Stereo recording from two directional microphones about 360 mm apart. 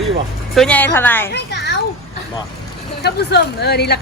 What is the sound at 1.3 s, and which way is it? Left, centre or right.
Children playing, left.